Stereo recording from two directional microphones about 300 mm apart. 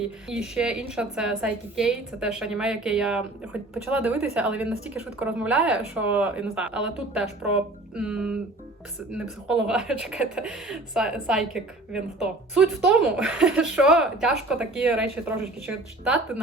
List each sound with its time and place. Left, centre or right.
0.3 s speech: centre